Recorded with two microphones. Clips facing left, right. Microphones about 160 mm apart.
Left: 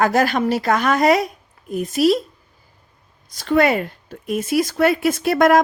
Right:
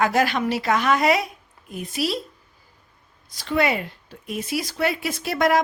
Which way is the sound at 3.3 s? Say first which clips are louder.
Left 6 dB; 45° left (ahead or behind).